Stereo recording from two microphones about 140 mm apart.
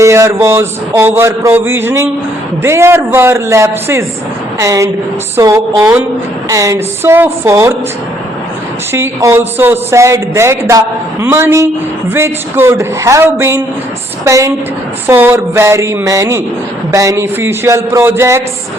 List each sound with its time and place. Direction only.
0.0 s a man's voice: 20° right (ahead or behind)
8.9 s speech: 15° right (ahead or behind)